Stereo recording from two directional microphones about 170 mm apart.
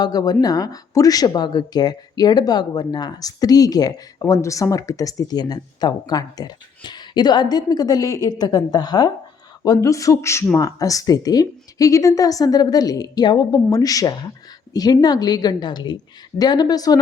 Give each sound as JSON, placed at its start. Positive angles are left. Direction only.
{"t": 0.0, "sound": "speech", "side_deg": 25}